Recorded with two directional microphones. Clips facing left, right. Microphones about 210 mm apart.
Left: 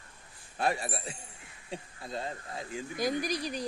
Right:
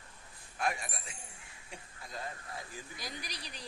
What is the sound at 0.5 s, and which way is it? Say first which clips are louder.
Speech: left 5 dB; 35° left (ahead or behind).